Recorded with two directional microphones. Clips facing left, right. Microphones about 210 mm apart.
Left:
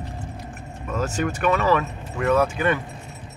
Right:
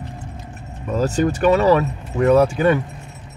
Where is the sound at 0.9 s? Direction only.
35° right (ahead or behind).